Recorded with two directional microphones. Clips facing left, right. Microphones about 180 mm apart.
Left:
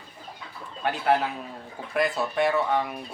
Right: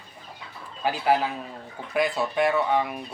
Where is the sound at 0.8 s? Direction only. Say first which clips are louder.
Right 1 dB; 5° right (ahead or behind).